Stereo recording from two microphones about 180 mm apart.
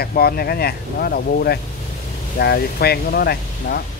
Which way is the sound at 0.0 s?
55° left (ahead or behind).